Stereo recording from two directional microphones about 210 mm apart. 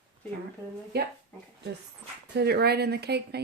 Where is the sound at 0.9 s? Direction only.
50° right (ahead or behind).